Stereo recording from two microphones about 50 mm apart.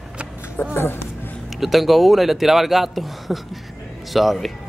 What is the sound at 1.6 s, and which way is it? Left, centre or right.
Speech, centre.